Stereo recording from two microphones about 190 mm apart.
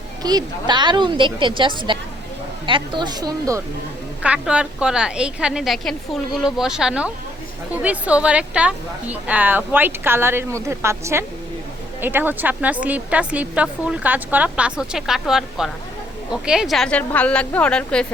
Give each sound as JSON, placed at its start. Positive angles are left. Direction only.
{"t": 0.2, "sound": "a woman's voice", "side_deg": -20}
{"t": 4.2, "sound": "a woman's voice", "side_deg": -5}